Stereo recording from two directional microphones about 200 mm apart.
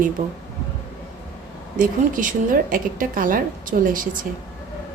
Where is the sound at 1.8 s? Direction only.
40° right (ahead or behind).